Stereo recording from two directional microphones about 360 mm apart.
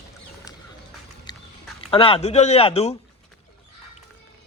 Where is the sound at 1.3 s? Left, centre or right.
Centre.